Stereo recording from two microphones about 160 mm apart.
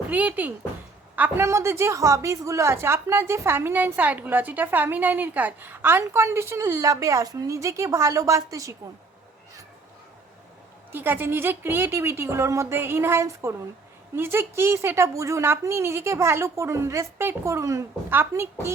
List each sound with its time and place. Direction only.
0.1 s a woman's voice: 10° right (ahead or behind)
10.9 s a woman's voice: 10° right (ahead or behind)